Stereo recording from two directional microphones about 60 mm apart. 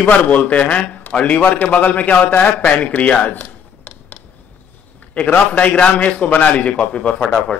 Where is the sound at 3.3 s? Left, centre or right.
Left.